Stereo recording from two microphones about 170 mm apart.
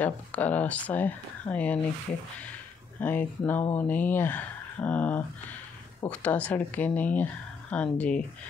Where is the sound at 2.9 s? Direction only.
10° left (ahead or behind).